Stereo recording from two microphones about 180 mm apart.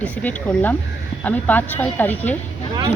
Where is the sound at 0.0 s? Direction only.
10° left (ahead or behind).